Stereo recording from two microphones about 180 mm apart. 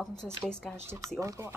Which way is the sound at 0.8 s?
15° right (ahead or behind).